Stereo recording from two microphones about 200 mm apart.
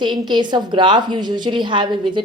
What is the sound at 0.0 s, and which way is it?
Speech, 20° right (ahead or behind).